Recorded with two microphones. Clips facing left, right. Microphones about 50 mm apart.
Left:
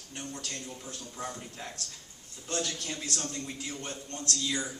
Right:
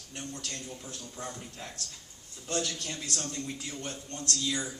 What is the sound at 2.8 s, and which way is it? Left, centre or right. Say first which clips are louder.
Speech: left 1 dB; centre.